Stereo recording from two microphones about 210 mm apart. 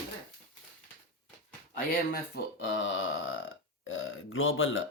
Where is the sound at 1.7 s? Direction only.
45° left (ahead or behind).